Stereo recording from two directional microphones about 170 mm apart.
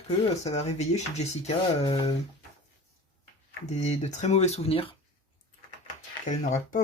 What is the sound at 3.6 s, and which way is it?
Speech, 40° left (ahead or behind).